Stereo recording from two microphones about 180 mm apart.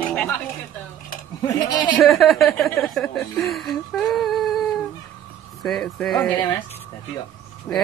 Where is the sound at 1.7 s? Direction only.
25° left (ahead or behind).